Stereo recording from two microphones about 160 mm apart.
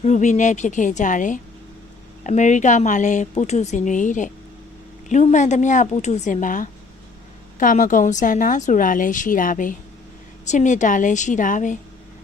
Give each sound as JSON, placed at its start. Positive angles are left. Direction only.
{"t": 0.0, "sound": "a woman's voice", "side_deg": 50}